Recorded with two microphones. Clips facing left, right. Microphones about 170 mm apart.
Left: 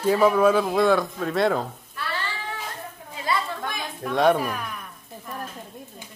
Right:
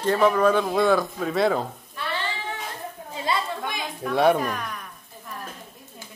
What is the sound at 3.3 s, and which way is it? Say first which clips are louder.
Chatter: even; 20° right (ahead or behind).